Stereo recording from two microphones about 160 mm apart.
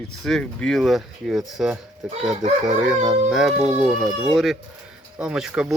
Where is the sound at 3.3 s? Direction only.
Centre (ahead or behind).